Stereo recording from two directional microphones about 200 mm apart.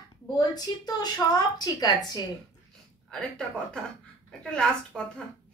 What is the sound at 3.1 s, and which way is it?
Speech, 5° left (ahead or behind).